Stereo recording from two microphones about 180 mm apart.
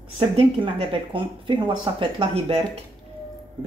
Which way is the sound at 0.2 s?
35° right (ahead or behind).